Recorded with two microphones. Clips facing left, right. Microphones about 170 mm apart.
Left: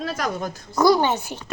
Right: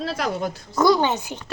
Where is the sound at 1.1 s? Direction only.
20° right (ahead or behind).